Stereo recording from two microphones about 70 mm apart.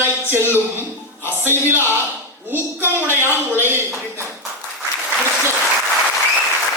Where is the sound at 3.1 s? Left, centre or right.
Right.